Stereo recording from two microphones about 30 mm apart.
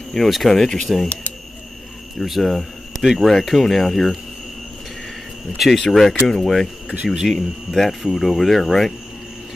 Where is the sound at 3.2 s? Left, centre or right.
Centre.